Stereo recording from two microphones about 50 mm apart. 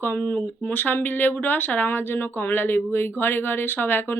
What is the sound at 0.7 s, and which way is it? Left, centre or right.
Speech, left.